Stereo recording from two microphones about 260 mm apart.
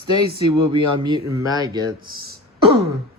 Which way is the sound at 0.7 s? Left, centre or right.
Centre.